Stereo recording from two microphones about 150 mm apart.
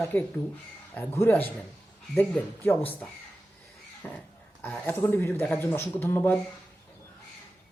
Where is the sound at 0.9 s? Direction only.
15° left (ahead or behind).